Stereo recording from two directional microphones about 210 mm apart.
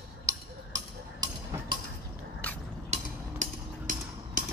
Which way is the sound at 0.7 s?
15° right (ahead or behind).